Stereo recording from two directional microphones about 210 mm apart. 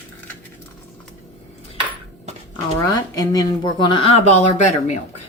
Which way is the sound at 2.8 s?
15° left (ahead or behind).